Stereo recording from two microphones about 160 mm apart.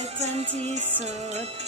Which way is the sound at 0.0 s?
40° right (ahead or behind).